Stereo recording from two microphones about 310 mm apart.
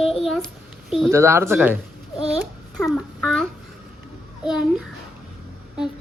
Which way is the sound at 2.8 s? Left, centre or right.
Centre.